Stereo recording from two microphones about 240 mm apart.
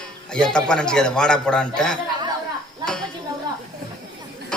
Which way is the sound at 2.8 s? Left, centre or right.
Centre.